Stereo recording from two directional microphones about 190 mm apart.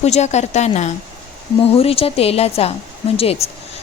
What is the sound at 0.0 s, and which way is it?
A woman's voice, 35° left (ahead or behind).